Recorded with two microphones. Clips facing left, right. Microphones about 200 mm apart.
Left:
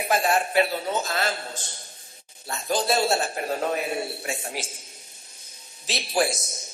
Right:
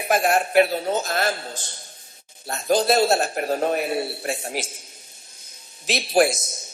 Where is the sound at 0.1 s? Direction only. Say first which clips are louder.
Right 4 dB; 50° right (ahead or behind).